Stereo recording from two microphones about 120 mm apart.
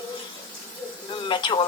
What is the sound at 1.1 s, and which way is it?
Speech, 40° left (ahead or behind).